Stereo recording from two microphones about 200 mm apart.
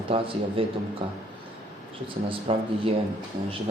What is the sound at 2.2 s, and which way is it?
Speech, 30° right (ahead or behind).